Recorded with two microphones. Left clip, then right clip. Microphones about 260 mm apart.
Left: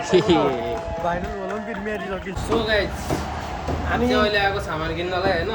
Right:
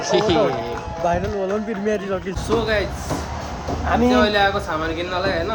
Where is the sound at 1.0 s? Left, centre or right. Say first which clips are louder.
Right 7 dB; right.